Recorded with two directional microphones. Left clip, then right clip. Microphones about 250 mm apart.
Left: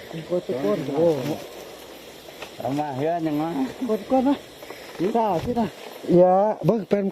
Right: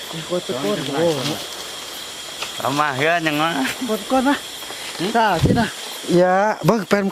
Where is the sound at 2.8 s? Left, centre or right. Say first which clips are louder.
Right 7 dB; right.